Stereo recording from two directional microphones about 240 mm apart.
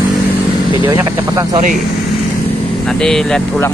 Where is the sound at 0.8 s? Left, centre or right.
Centre.